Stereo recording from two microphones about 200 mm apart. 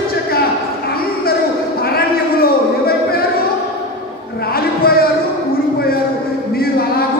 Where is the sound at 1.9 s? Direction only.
50° left (ahead or behind).